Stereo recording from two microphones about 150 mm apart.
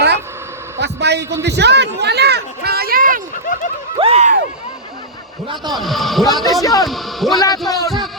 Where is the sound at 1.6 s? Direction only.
90° right; by 3.2 s 70° right (ahead or behind).